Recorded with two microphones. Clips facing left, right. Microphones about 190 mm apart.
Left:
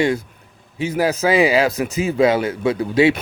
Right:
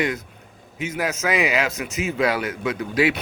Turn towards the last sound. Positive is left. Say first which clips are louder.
# left 6 dB
turn(degrees=30)  # may be behind; listen again after turning